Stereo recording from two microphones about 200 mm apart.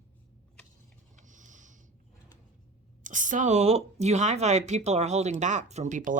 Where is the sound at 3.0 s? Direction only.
40° right (ahead or behind).